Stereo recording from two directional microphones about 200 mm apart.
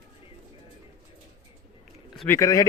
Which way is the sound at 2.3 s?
15° left (ahead or behind).